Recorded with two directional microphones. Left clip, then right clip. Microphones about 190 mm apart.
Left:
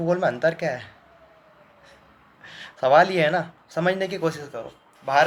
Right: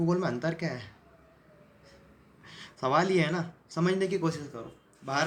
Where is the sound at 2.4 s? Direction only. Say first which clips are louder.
Left 10 dB; 15° right (ahead or behind).